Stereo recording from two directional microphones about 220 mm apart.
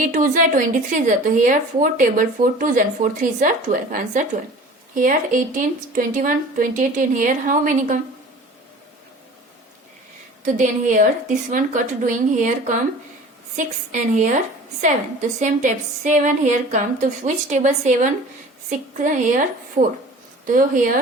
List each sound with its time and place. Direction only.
0.0 s a woman's voice: 35° right (ahead or behind)
10.4 s a woman's voice: 35° right (ahead or behind)
15.4 s a woman's voice: 35° right (ahead or behind)
19.8 s speech: 15° right (ahead or behind)
20.5 s a woman's voice: 40° right (ahead or behind)